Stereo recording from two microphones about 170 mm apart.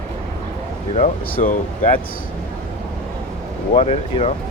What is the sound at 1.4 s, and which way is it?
Speech, 50° left (ahead or behind).